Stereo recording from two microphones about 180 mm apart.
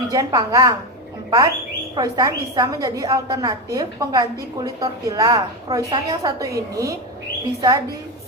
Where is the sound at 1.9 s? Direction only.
20° right (ahead or behind).